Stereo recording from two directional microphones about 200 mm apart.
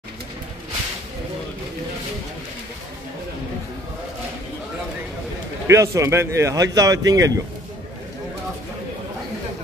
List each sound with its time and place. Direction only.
5.7 s speech: 15° right (ahead or behind)